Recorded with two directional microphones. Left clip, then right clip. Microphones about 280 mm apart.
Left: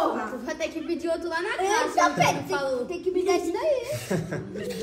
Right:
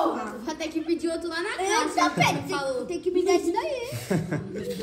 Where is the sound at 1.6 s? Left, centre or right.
Right.